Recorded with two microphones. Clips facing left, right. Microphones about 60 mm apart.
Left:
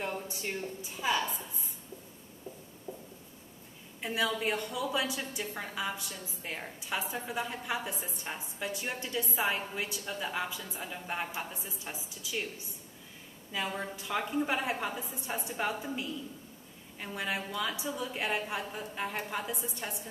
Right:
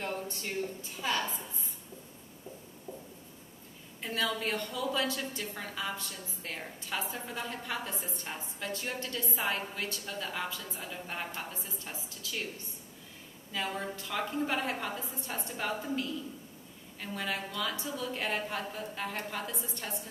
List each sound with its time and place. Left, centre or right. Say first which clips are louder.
0.0 s a woman's voice: even; centre
4.0 s a woman's voice: left 2 dB; centre
13.5 s a woman's voice: even; centre